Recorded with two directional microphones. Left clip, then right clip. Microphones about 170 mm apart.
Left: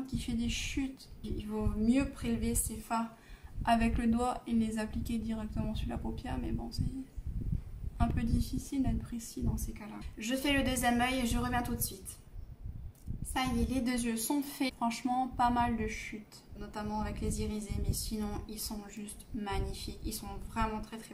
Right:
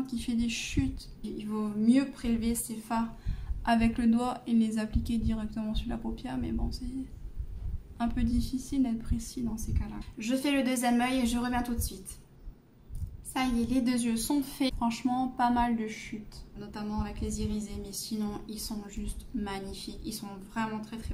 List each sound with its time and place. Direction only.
0.0 s a woman's voice: 5° right (ahead or behind)
8.0 s a woman's voice: 5° right (ahead or behind)
13.3 s a woman's voice: 5° right (ahead or behind)